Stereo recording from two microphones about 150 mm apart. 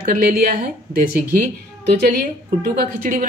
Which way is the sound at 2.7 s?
70° right (ahead or behind).